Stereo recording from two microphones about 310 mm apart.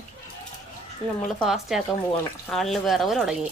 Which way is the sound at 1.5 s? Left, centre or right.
Centre.